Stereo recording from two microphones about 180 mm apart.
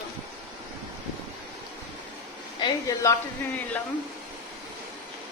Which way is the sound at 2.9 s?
15° left (ahead or behind).